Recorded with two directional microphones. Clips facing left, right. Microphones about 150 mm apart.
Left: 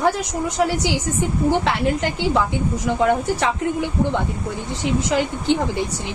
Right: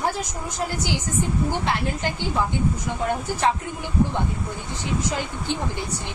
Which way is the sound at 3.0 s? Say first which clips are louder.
Left 8 dB; 90° left.